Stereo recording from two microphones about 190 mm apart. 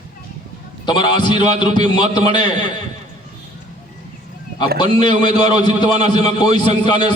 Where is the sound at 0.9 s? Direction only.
25° left (ahead or behind).